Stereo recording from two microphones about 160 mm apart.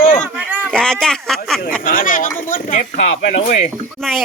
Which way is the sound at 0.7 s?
5° left (ahead or behind).